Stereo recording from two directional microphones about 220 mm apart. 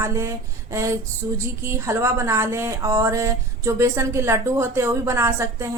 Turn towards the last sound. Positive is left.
turn(degrees=-10)  # may be behind; listen again after turning